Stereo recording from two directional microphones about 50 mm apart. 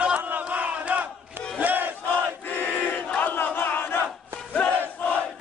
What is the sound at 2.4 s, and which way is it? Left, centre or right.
Battle cry, left.